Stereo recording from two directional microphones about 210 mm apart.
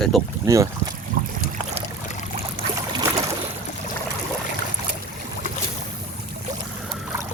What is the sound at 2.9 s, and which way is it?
Boat, 20° right (ahead or behind).